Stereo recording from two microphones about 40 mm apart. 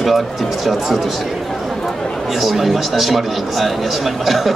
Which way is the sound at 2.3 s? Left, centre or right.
Centre.